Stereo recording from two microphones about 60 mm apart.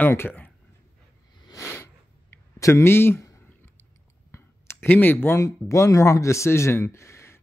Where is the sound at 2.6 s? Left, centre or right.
Left.